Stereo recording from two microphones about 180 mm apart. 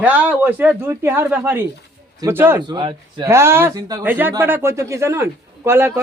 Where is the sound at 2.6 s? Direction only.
25° right (ahead or behind).